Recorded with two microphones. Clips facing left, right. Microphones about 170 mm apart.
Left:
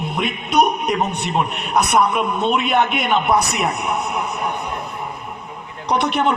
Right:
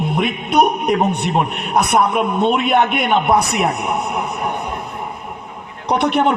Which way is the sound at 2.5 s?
55° right (ahead or behind).